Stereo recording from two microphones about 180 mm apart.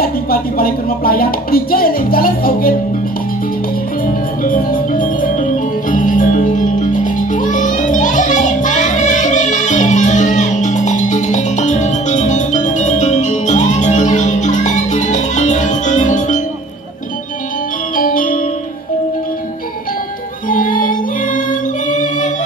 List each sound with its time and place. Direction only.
0.0 s speech: 55° left (ahead or behind)
4.0 s music: 50° left (ahead or behind)
17.9 s music: 50° left (ahead or behind)
20.4 s music: 50° left (ahead or behind)